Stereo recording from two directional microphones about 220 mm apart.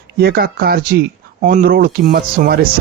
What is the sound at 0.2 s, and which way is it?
Speech, 45° right (ahead or behind).